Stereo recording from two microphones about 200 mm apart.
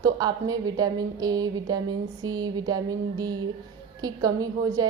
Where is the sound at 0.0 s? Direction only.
20° right (ahead or behind).